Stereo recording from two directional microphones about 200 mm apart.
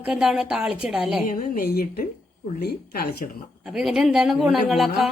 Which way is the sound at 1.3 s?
45° left (ahead or behind).